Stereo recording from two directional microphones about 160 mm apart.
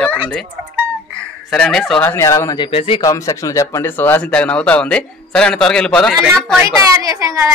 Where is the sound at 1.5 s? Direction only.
5° left (ahead or behind); by 3.0 s 35° left (ahead or behind).